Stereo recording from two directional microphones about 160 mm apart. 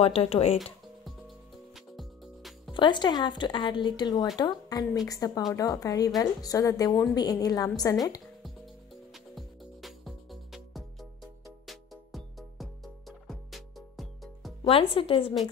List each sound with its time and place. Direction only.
0.0 s speech: 40° left (ahead or behind)
2.0 s music: centre (ahead or behind)
2.7 s a woman's voice: 30° left (ahead or behind)
9.1 s music: centre (ahead or behind)
14.7 s speech: 35° left (ahead or behind)